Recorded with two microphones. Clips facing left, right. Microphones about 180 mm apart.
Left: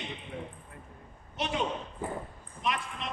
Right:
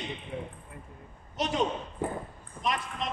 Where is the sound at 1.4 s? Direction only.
40° right (ahead or behind).